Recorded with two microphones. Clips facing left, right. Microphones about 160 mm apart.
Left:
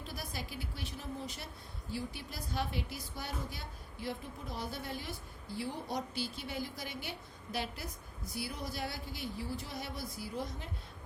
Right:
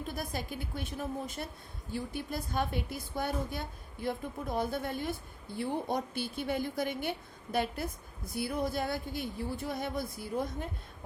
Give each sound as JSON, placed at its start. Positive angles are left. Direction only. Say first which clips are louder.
{"t": 0.0, "sound": "a woman's voice", "louder": "right 6 dB", "side_deg": -50}